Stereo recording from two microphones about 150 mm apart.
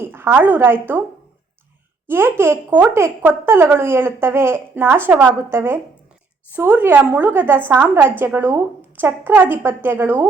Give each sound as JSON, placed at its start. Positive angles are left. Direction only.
{"t": 0.1, "sound": "a woman's voice", "side_deg": -15}
{"t": 2.0, "sound": "a woman's voice", "side_deg": -15}